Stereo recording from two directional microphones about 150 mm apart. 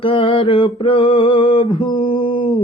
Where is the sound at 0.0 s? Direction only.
35° left (ahead or behind).